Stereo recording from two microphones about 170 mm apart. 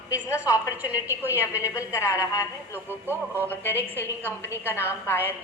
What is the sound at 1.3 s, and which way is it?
A woman's voice, 15° left (ahead or behind).